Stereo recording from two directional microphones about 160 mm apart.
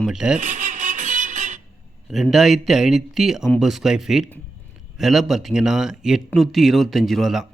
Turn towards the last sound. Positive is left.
turn(degrees=0)  # may be behind; listen again after turning